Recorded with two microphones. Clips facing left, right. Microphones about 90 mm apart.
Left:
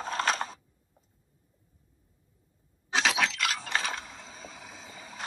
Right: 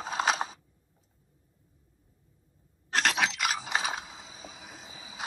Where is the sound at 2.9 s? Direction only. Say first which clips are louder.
Even; centre (ahead or behind).